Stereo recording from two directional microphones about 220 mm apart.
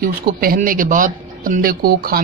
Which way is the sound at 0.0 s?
40° right (ahead or behind).